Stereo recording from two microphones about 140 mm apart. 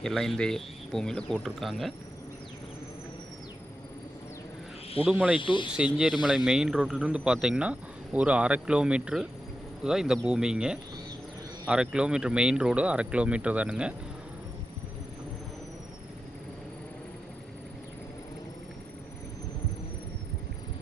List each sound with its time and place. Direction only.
0.0 s speech: centre (ahead or behind)
5.0 s speech: 10° right (ahead or behind)
5.4 s speech: 35° left (ahead or behind)
5.7 s speech: 5° right (ahead or behind)